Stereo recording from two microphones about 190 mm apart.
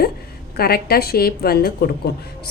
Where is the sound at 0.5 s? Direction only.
55° left (ahead or behind).